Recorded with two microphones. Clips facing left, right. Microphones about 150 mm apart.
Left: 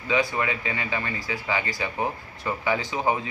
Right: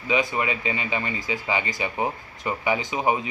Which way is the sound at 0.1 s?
20° right (ahead or behind).